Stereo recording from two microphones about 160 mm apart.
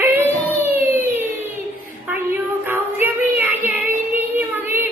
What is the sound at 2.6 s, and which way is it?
Child singing, 15° right (ahead or behind).